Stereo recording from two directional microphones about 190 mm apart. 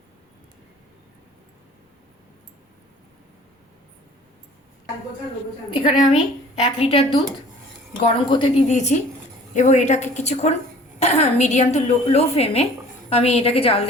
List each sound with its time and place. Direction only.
5.7 s a woman's voice: 30° left (ahead or behind)